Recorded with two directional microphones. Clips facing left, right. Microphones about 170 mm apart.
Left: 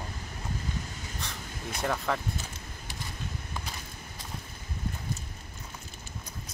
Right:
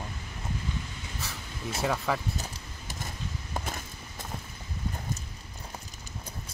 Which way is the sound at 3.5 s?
50° right (ahead or behind).